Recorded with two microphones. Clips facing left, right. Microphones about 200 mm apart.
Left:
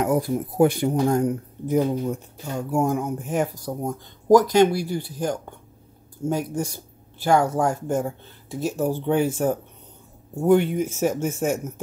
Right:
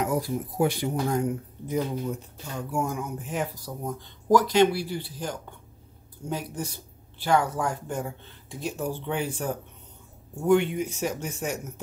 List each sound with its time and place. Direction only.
0.0 s speech: 50° left (ahead or behind)